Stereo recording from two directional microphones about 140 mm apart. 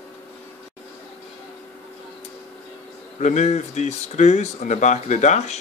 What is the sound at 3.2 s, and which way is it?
Speech, 55° left (ahead or behind).